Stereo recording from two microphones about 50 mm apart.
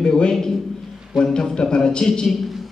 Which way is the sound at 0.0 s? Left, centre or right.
Centre.